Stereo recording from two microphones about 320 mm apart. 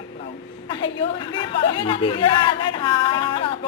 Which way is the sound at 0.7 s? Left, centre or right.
Centre.